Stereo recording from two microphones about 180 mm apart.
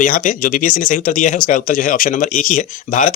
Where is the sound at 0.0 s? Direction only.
50° left (ahead or behind).